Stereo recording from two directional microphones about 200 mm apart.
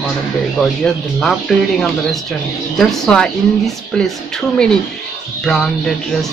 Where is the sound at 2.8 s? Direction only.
5° left (ahead or behind).